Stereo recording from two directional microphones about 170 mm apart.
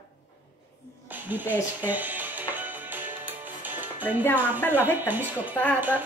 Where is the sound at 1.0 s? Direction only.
10° right (ahead or behind).